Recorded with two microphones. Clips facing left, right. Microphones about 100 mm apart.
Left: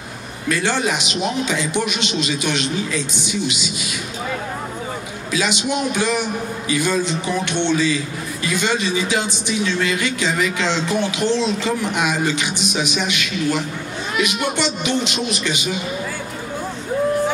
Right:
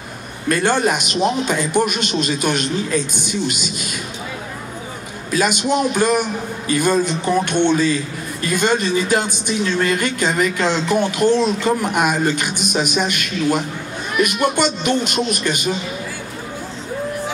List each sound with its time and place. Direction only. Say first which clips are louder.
0.5 s speech: right 3 dB; 50° right (ahead or behind)
5.3 s speech: right 4 dB; 50° right (ahead or behind)